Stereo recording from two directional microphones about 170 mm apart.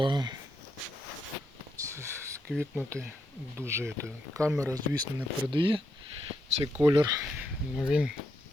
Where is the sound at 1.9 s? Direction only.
15° right (ahead or behind).